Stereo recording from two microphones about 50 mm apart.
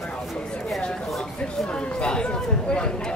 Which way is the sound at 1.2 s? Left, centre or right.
Centre.